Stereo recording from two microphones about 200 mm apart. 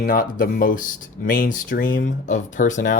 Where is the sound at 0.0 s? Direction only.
45° left (ahead or behind).